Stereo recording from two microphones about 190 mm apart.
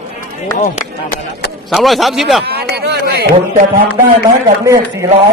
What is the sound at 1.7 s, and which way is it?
Speech, centre (ahead or behind).